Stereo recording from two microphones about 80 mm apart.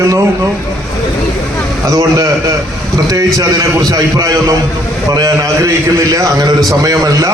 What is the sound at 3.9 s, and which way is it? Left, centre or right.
A man's voice, right.